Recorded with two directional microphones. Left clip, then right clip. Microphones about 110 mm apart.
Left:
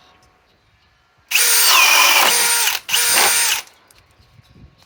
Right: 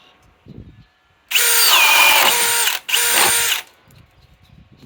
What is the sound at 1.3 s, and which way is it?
Drill, 15° right (ahead or behind).